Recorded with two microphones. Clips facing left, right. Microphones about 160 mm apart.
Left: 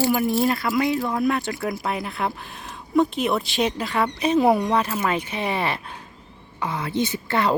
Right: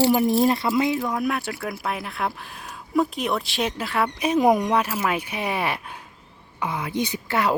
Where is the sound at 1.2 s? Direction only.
5° right (ahead or behind).